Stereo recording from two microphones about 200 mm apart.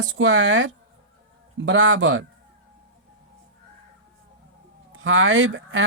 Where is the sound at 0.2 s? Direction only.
70° right (ahead or behind).